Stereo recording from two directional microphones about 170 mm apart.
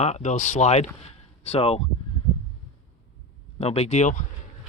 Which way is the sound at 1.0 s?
35° left (ahead or behind).